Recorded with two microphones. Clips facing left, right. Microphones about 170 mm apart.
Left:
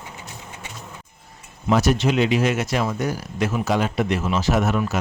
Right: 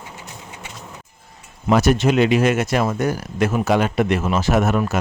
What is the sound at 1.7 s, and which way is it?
A man's voice, 55° right (ahead or behind).